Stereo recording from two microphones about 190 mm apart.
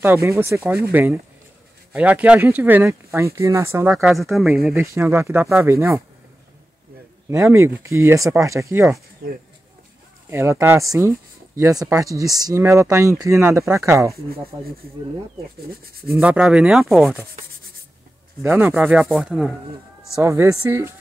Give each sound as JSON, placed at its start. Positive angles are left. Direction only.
{"t": 0.0, "sound": "speech", "side_deg": -15}
{"t": 1.9, "sound": "speech", "side_deg": -5}
{"t": 3.9, "sound": "speech", "side_deg": 0}
{"t": 7.2, "sound": "speech", "side_deg": -15}
{"t": 10.3, "sound": "speech", "side_deg": -15}
{"t": 16.1, "sound": "speech", "side_deg": -5}
{"t": 18.4, "sound": "speech", "side_deg": -10}